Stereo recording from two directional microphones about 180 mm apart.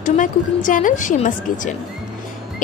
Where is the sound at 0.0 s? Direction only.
45° left (ahead or behind).